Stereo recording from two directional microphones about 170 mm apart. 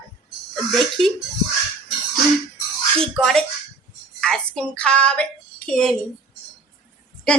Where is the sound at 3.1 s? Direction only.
5° left (ahead or behind).